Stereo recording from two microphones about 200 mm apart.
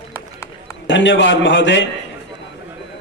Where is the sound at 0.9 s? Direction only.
65° left (ahead or behind).